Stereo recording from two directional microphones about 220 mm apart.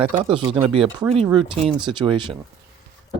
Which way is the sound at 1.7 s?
5° right (ahead or behind).